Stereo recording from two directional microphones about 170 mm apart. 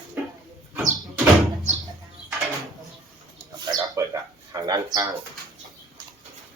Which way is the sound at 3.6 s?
25° right (ahead or behind).